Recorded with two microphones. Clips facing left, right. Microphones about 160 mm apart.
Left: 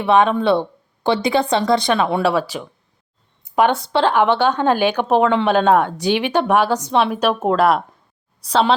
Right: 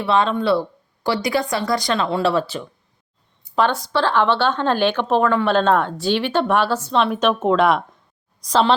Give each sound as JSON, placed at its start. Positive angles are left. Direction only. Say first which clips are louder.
{"t": 0.0, "sound": "a woman's voice", "louder": "left 4 dB", "side_deg": 15}
{"t": 3.8, "sound": "a woman's voice", "louder": "left 3 dB", "side_deg": 25}